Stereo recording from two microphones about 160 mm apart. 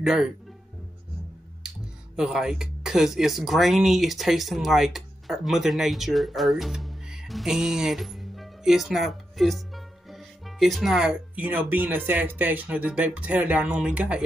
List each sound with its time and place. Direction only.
0.0 s speech: 5° right (ahead or behind)
2.1 s speech: 5° right (ahead or behind)